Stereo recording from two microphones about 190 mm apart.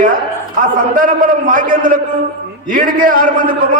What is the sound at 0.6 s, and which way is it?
A man's voice, 45° right (ahead or behind).